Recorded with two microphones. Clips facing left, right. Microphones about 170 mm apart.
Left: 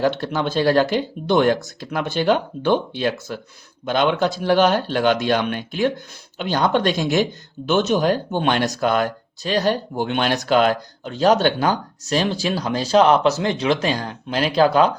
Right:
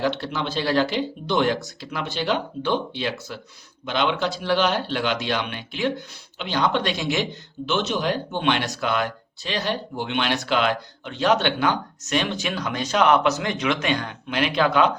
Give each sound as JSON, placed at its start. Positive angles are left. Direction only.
{"t": 0.0, "sound": "speech", "side_deg": 45}